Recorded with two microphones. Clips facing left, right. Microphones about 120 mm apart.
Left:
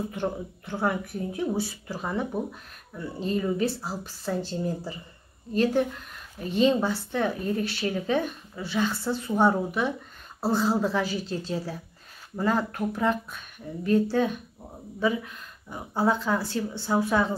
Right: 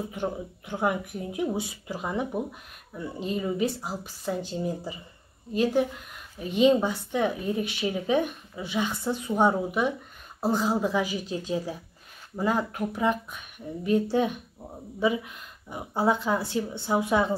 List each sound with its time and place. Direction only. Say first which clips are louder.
0.1 s a woman's voice: left 1 dB; 10° right (ahead or behind)